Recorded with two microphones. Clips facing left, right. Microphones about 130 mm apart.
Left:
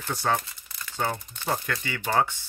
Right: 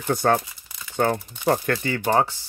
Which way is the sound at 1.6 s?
40° right (ahead or behind).